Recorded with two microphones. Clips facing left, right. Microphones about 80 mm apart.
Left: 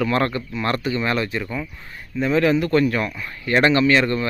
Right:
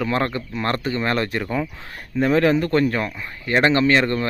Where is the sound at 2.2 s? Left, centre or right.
Right.